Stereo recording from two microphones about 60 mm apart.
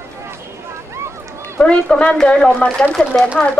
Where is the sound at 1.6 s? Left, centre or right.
Centre.